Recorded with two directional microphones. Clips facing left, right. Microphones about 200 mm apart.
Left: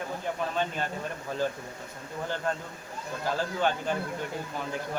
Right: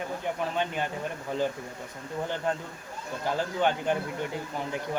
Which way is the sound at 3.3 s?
15° right (ahead or behind).